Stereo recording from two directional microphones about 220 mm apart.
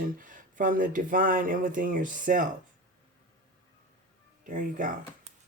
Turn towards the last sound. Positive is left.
turn(degrees=-35)  # may be behind; listen again after turning